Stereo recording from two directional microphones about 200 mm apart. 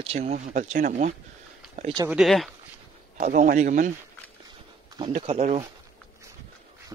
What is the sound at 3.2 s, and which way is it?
Speech, 40° right (ahead or behind).